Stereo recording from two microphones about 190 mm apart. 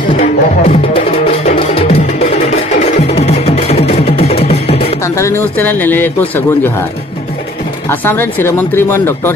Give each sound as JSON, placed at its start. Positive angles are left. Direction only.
{"t": 0.2, "sound": "music", "side_deg": 35}
{"t": 5.0, "sound": "a man's voice", "side_deg": 15}
{"t": 7.9, "sound": "a man's voice", "side_deg": 10}